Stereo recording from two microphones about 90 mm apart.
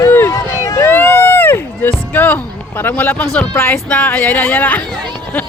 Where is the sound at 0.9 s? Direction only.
25° left (ahead or behind).